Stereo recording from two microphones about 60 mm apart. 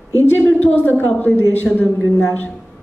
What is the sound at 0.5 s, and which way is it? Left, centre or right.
A woman's voice, left.